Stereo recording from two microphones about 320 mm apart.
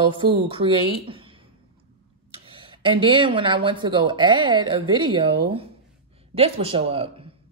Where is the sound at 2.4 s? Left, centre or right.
Centre.